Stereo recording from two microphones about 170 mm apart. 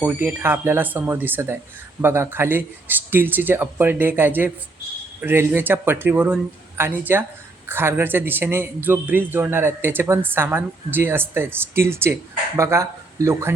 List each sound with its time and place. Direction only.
0.0 s a man's voice: 10° right (ahead or behind)